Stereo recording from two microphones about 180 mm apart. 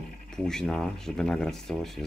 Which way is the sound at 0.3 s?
5° left (ahead or behind).